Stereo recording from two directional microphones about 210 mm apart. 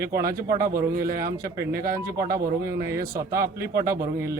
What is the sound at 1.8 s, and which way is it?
Speech, 15° right (ahead or behind).